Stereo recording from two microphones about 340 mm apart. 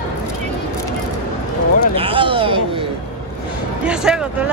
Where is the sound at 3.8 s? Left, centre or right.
Centre.